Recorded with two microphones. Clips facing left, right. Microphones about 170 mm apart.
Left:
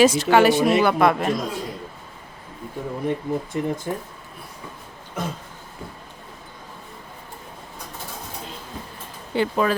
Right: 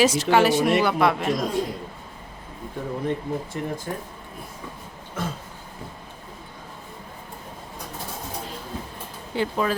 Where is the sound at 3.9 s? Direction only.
20° left (ahead or behind).